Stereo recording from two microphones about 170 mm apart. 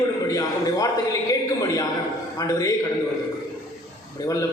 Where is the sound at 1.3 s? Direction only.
20° left (ahead or behind).